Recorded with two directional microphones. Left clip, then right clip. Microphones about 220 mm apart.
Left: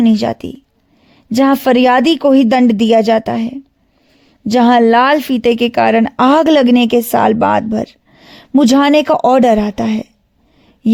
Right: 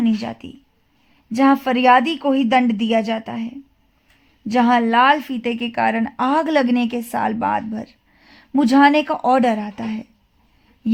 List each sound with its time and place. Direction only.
0.0 s a woman's voice: 45° left (ahead or behind)